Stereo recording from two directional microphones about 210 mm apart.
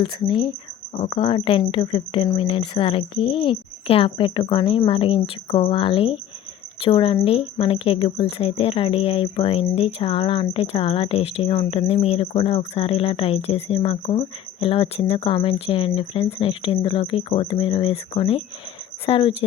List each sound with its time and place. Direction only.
0.0 s speech: 25° left (ahead or behind)